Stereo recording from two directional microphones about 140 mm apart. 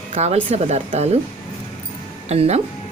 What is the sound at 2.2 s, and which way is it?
Speech, 50° right (ahead or behind).